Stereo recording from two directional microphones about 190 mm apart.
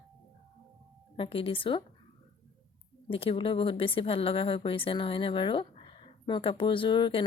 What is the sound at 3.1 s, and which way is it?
Speech, 30° left (ahead or behind).